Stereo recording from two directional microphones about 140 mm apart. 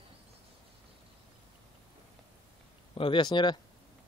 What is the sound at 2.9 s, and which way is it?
Speech, 40° left (ahead or behind).